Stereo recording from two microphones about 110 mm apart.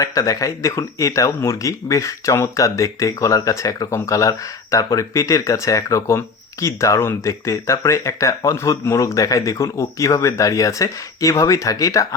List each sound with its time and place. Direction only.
0.0 s speech: 30° left (ahead or behind)